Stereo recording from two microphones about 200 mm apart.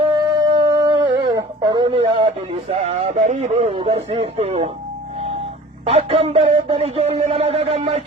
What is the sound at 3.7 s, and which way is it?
Speech, 30° right (ahead or behind).